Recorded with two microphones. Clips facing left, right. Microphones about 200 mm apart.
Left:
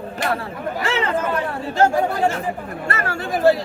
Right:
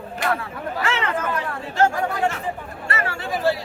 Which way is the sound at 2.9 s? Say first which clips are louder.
Left 2 dB; 45° left (ahead or behind).